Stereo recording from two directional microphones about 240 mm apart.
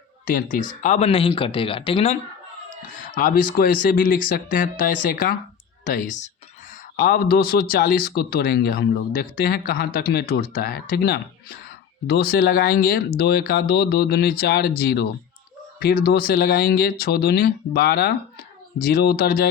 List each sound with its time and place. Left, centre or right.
0.3 s speech: left
2.9 s speech: left